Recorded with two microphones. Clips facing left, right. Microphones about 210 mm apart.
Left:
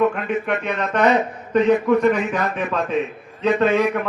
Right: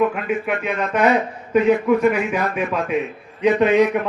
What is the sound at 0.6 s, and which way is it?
A man's voice, 5° right (ahead or behind).